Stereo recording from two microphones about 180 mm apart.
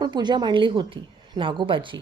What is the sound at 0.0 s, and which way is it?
A woman's voice, 25° right (ahead or behind).